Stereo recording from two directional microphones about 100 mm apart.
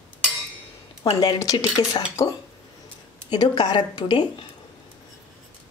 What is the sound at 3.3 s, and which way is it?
Speech, 45° left (ahead or behind).